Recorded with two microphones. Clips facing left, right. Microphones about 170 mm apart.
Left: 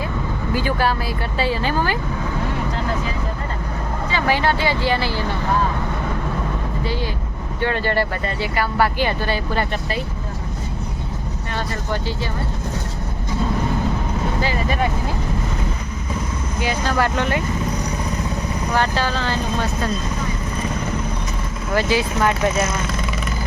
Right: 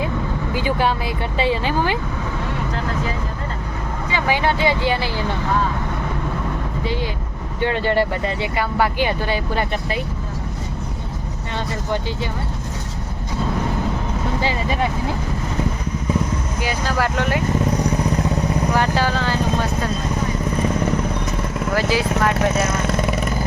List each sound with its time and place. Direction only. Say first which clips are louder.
0.5 s speech: even; 20° right (ahead or behind)
4.1 s speech: even; 15° right (ahead or behind)
7.6 s speech: right 2 dB; 15° right (ahead or behind)
16.6 s speech: left 2 dB; 5° right (ahead or behind)
18.8 s speech: right 1 dB; 10° right (ahead or behind)
21.8 s speech: left 1 dB; centre (ahead or behind)
22.9 s vehicle: right 5 dB; 55° right (ahead or behind)